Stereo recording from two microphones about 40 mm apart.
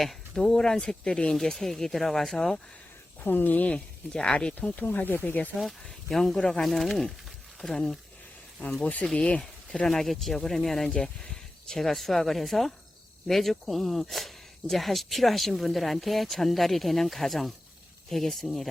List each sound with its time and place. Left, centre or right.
0.0 s speech: centre
1.4 s speech: centre
3.2 s speech: left
3.7 s speech: left
4.5 s speech: left
5.5 s speech: centre
8.8 s speech: left
9.8 s speech: centre
10.9 s speech: centre
11.8 s speech: centre